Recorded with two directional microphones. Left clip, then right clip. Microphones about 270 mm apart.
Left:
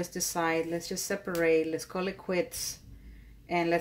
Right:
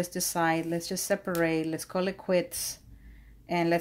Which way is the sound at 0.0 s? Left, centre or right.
Right.